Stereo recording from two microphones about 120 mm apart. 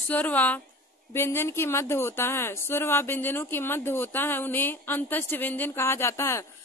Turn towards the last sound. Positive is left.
turn(degrees=20)  # may be behind; listen again after turning